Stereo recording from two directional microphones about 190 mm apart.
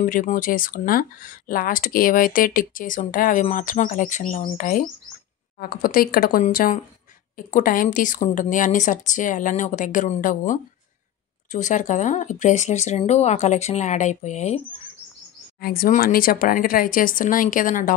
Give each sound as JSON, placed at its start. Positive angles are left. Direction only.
{"t": 0.0, "sound": "speech", "side_deg": 45}
{"t": 15.6, "sound": "speech", "side_deg": 50}